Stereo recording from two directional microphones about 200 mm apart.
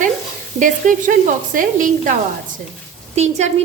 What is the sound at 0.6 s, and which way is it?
A woman's voice, 40° right (ahead or behind).